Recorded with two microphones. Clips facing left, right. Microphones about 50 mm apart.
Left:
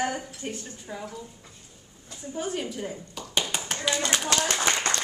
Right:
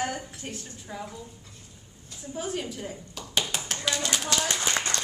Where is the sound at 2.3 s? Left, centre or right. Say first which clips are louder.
Left 1 dB; centre.